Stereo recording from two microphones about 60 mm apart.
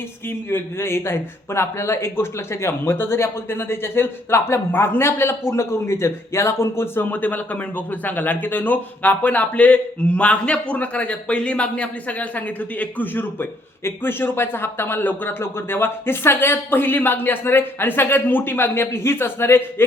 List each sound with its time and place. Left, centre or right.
0.3 s a man's voice: left